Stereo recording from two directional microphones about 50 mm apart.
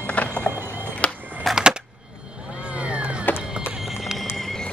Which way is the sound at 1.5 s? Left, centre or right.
Centre.